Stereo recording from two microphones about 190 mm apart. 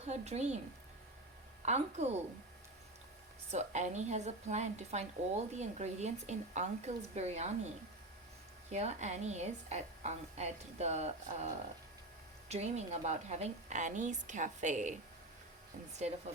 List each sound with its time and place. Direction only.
0.0 s a woman's voice: 35° right (ahead or behind)
1.6 s a woman's voice: 35° right (ahead or behind)
3.5 s a woman's voice: 35° right (ahead or behind)
8.7 s a woman's voice: 35° right (ahead or behind)